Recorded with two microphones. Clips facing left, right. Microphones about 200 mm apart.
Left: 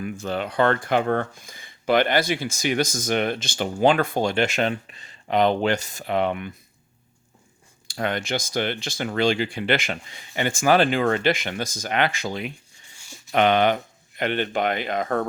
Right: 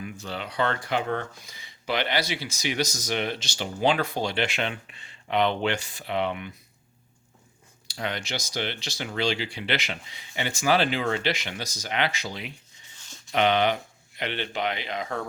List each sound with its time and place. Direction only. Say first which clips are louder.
0.0 s speech: left 7 dB; 50° left (ahead or behind)
7.9 s speech: left 6 dB; 50° left (ahead or behind)
13.0 s a sound: left 4 dB; 10° left (ahead or behind)
13.3 s speech: left 4 dB; 50° left (ahead or behind)